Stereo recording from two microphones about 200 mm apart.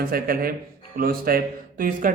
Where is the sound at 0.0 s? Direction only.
45° right (ahead or behind).